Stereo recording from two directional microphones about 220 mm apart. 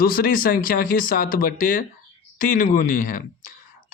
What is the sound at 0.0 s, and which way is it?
Speech, 40° left (ahead or behind).